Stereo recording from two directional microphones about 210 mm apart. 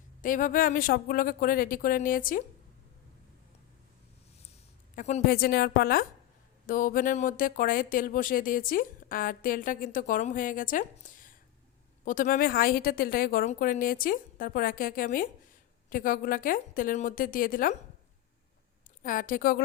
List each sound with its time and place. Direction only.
0.2 s speech: 40° left (ahead or behind)
4.9 s a woman's voice: 35° left (ahead or behind)
19.0 s speech: 40° left (ahead or behind)